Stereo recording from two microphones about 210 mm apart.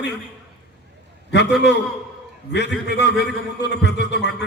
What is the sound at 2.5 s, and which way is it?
A man's voice, 55° left (ahead or behind).